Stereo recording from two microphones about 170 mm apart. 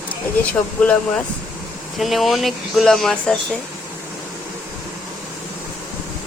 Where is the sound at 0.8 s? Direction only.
5° left (ahead or behind).